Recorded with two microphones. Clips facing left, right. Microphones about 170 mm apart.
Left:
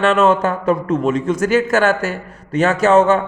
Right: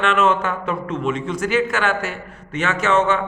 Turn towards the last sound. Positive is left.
turn(degrees=40)  # may be behind; listen again after turning